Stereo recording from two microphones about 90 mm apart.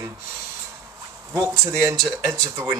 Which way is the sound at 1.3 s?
30° right (ahead or behind).